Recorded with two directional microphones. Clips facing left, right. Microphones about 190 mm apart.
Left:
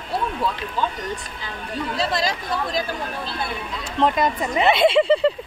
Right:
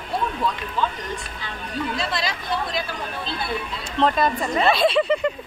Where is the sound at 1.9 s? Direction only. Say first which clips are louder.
Left 3 dB; 40° left (ahead or behind).